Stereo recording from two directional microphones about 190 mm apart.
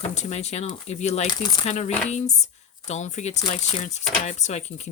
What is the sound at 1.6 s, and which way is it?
Speech, 35° left (ahead or behind).